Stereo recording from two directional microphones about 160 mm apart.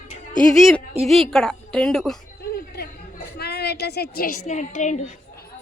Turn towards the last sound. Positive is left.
turn(degrees=50)  # may be behind; listen again after turning